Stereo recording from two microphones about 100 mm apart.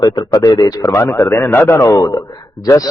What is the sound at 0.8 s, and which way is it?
Speech, 30° left (ahead or behind).